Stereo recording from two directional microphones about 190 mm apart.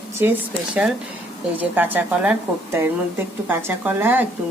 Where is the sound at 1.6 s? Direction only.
10° right (ahead or behind).